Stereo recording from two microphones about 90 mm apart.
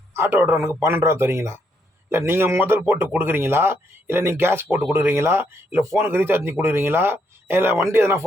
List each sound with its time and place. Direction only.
0.2 s a man's voice: 25° right (ahead or behind)